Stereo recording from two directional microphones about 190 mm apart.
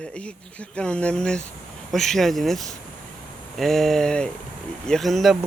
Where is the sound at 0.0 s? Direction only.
5° left (ahead or behind).